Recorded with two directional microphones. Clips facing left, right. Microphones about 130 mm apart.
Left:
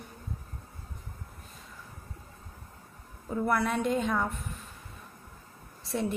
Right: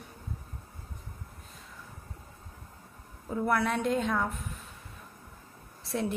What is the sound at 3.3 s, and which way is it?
A woman's voice, centre (ahead or behind).